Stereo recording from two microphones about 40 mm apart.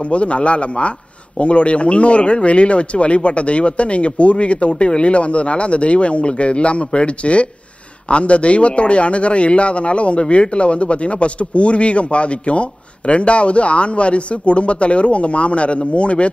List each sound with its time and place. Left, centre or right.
0.0 s a man's voice: left